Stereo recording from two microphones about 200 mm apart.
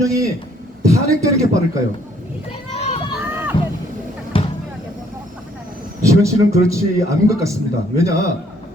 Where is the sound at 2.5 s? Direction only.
35° left (ahead or behind).